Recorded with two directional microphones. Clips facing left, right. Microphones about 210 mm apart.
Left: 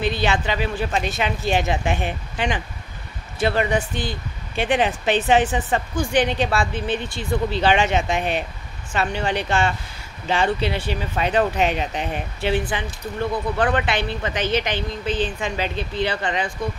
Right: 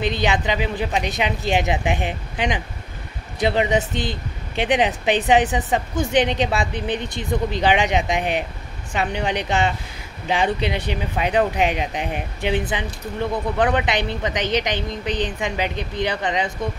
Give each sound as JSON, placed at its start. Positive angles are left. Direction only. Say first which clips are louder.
{"t": 0.0, "sound": "speech", "louder": "right 1 dB", "side_deg": -20}